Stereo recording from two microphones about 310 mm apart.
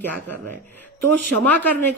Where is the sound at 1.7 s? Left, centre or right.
Centre.